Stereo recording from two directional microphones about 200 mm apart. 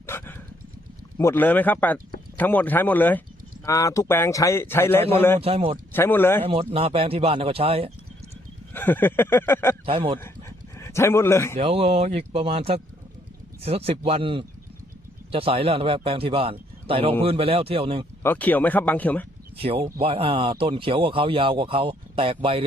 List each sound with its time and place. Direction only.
0.0 s dog: 10° left (ahead or behind)
1.2 s a man's voice: 10° left (ahead or behind)
5.4 s speech: 30° right (ahead or behind)
5.9 s a man's voice: 10° left (ahead or behind)
6.4 s speech: 30° right (ahead or behind)
8.7 s a man's voice: 10° left (ahead or behind)
9.8 s speech: 25° right (ahead or behind)
10.8 s a man's voice: 15° left (ahead or behind)
11.5 s speech: 30° right (ahead or behind)
18.2 s a man's voice: 10° left (ahead or behind)
19.5 s speech: 30° right (ahead or behind)